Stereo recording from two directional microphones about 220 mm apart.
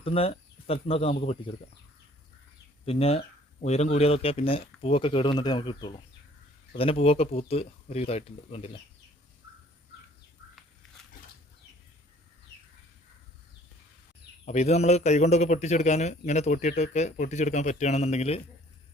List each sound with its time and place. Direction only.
0.0 s speech: 25° left (ahead or behind)
2.8 s speech: 25° left (ahead or behind)
14.4 s a man's voice: 30° left (ahead or behind)